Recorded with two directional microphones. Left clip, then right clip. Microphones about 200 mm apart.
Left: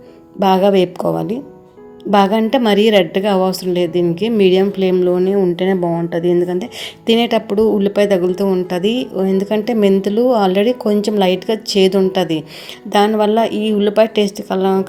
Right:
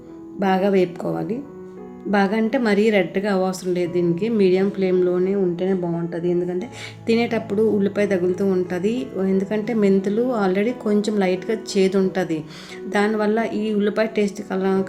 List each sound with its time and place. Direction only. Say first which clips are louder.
0.3 s speech: left 7 dB; 30° left (ahead or behind)
13.5 s speech: left 6 dB; 5° right (ahead or behind)
13.7 s speech: left 8 dB; 25° left (ahead or behind)